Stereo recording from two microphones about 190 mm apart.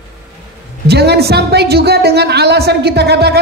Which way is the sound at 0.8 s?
60° right (ahead or behind).